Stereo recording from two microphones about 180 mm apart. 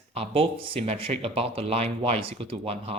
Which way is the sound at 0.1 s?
30° right (ahead or behind).